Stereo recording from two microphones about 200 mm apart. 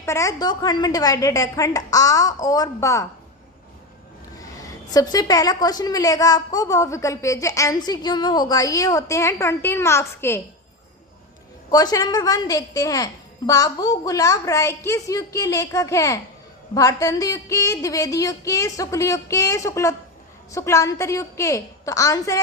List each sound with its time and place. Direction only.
0.0 s a woman's voice: 15° left (ahead or behind)
4.4 s a woman's voice: 20° left (ahead or behind)
11.7 s a woman's voice: 20° left (ahead or behind)